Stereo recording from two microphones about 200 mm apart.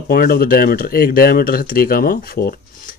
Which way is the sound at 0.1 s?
50° left (ahead or behind).